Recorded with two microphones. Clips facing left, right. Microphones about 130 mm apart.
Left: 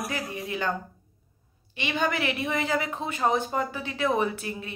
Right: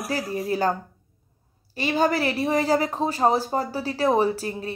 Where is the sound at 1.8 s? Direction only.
40° right (ahead or behind).